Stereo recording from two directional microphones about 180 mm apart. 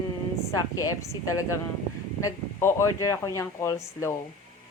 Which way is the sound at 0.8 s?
20° left (ahead or behind).